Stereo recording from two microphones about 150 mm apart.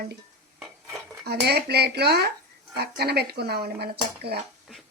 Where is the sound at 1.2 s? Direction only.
90° right.